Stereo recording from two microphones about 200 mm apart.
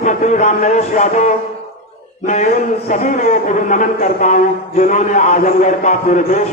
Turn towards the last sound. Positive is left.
turn(degrees=40)  # may be behind; listen again after turning